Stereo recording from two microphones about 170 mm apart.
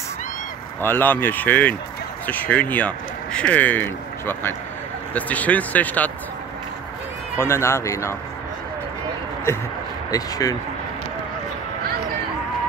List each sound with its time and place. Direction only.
0.7 s speech: 10° left (ahead or behind)
7.3 s speech: 15° left (ahead or behind)
10.1 s speech: 20° left (ahead or behind)